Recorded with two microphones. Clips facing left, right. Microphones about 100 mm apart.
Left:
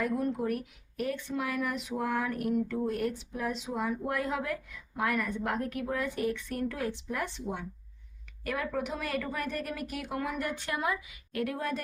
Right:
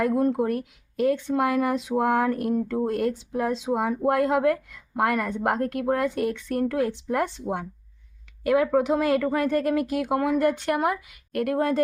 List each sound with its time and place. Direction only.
0.3 s speech: 90° right
5.8 s speech: 65° right (ahead or behind)
8.4 s speech: 85° right